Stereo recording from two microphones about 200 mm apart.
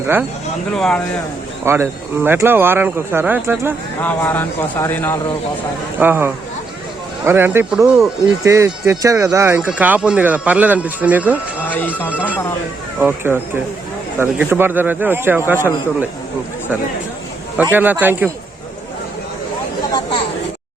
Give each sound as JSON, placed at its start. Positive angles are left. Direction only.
{"t": 0.7, "sound": "speech", "side_deg": 5}
{"t": 1.6, "sound": "speech", "side_deg": -10}
{"t": 4.0, "sound": "speech", "side_deg": 10}
{"t": 6.0, "sound": "speech", "side_deg": -10}
{"t": 8.4, "sound": "speech", "side_deg": -15}
{"t": 11.6, "sound": "speech", "side_deg": 10}
{"t": 12.1, "sound": "speech", "side_deg": -5}
{"t": 17.6, "sound": "speech", "side_deg": -10}
{"t": 19.9, "sound": "a sound", "side_deg": 25}